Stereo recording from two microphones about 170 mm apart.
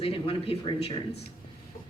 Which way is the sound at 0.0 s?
35° left (ahead or behind).